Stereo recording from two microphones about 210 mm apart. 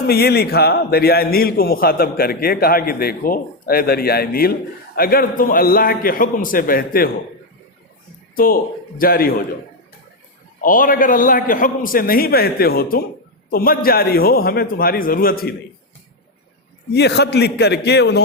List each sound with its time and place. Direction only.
0.1 s a man's voice: 50° left (ahead or behind)
9.0 s a man's voice: 45° left (ahead or behind)
10.6 s a man's voice: 40° left (ahead or behind)
16.9 s a man's voice: 50° left (ahead or behind)